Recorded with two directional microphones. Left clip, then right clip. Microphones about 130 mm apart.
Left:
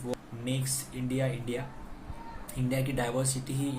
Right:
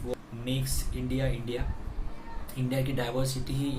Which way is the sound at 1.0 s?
30° left (ahead or behind).